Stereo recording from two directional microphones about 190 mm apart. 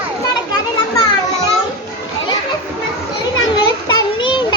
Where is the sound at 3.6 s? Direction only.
25° left (ahead or behind).